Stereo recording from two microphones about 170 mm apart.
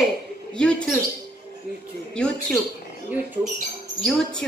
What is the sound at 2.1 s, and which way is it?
Speech, 5° left (ahead or behind).